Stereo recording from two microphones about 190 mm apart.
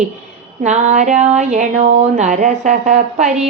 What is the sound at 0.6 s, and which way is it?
Music, 35° right (ahead or behind).